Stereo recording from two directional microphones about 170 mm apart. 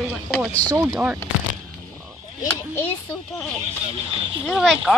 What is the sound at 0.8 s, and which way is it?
Speech, 5° right (ahead or behind).